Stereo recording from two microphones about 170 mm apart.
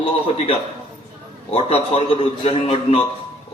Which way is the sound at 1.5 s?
35° left (ahead or behind).